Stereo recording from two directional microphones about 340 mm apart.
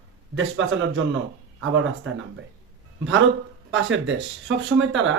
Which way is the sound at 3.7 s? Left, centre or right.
Right.